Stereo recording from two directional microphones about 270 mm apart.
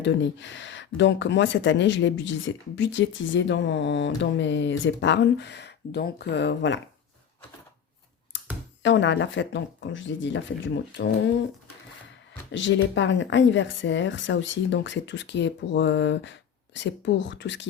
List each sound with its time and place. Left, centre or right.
0.0 s speech: left
8.3 s computer keyboard: left
8.8 s speech: left
12.5 s speech: left